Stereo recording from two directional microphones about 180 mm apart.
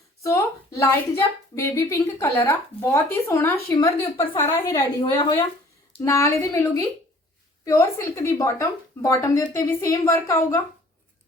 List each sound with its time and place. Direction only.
0.2 s a woman's voice: 15° left (ahead or behind)
4.8 s a woman's voice: 25° left (ahead or behind)
6.0 s speech: 15° left (ahead or behind)